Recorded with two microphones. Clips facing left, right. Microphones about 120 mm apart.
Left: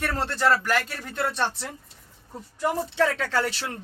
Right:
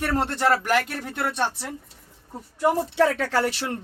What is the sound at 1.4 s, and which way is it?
Speech, 10° right (ahead or behind).